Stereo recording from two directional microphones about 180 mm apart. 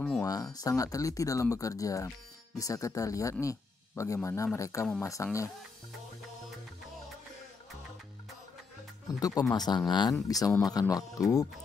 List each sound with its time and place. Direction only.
0.2 s speech: 20° left (ahead or behind)
9.2 s speech: 20° left (ahead or behind)